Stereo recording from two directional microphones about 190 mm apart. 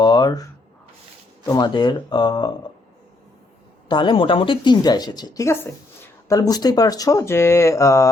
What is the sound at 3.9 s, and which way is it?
A woman's voice, 25° left (ahead or behind).